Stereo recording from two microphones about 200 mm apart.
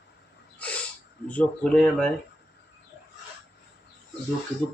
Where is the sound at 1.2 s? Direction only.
5° left (ahead or behind).